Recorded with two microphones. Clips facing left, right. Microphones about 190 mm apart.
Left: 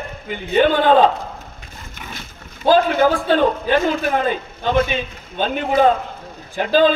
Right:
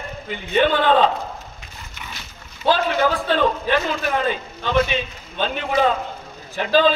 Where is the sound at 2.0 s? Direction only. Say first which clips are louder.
Left 3 dB; 50° left (ahead or behind).